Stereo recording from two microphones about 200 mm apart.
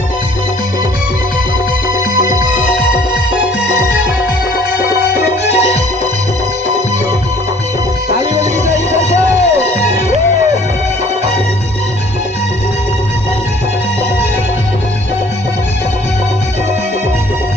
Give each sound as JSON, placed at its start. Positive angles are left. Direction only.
{"t": 5.5, "sound": "music", "side_deg": 30}
{"t": 8.9, "sound": "music", "side_deg": 35}